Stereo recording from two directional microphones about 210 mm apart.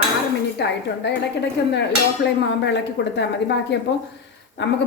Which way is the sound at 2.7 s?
55° left (ahead or behind).